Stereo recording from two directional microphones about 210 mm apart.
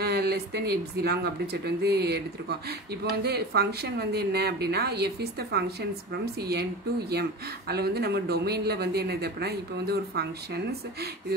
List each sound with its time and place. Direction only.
0.0 s speech: 50° right (ahead or behind)